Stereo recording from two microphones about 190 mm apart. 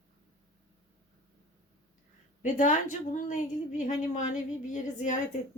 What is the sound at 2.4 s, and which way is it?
A woman's voice, 40° left (ahead or behind).